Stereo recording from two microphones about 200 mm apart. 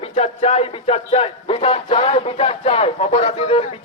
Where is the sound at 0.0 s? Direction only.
30° left (ahead or behind).